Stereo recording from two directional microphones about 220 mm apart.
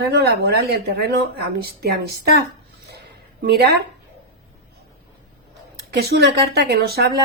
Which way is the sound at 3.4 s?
45° right (ahead or behind).